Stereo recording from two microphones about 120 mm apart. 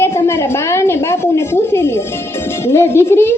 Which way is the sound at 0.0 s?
20° left (ahead or behind).